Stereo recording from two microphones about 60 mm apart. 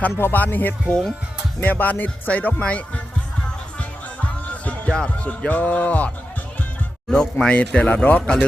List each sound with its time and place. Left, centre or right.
0.2 s speech: left
0.9 s speech: centre
1.6 s speech: left
3.8 s music: left
7.1 s speech: centre